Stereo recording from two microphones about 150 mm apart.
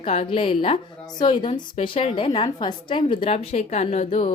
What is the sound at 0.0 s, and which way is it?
A woman's voice, 40° left (ahead or behind).